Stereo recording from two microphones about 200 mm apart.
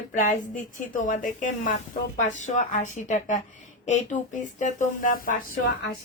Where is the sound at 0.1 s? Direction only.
40° left (ahead or behind).